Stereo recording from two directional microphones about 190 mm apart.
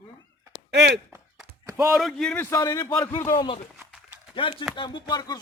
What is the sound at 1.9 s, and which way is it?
A man's voice, centre (ahead or behind).